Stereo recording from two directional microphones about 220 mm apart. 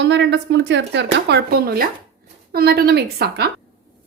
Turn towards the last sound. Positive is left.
turn(degrees=-45)  # may be behind; listen again after turning